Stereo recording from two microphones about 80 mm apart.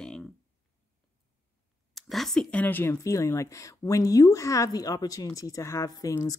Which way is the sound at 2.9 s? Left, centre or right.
Left.